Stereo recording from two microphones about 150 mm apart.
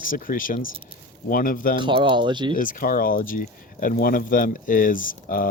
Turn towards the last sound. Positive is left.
turn(degrees=65)  # may be behind; listen again after turning